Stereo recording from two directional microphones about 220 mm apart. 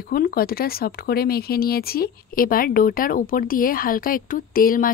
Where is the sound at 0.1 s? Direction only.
40° left (ahead or behind).